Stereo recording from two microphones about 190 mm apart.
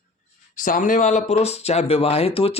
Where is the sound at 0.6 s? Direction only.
45° left (ahead or behind).